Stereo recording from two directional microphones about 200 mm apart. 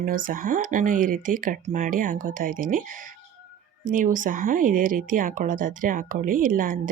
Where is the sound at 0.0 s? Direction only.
45° right (ahead or behind).